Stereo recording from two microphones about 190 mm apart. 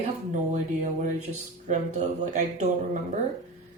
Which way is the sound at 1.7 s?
40° right (ahead or behind).